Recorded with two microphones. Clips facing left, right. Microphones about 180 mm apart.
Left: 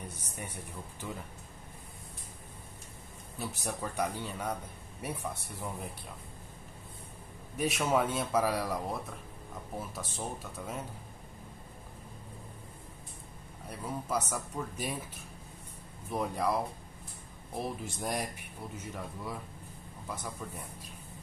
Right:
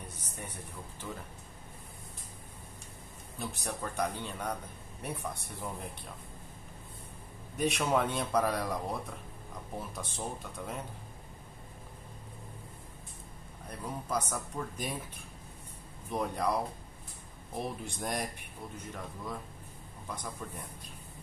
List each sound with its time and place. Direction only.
3.3 s speech: 5° left (ahead or behind)
7.5 s speech: 5° left (ahead or behind)
13.7 s speech: 5° left (ahead or behind)
16.1 s speech: centre (ahead or behind)
17.6 s speech: centre (ahead or behind)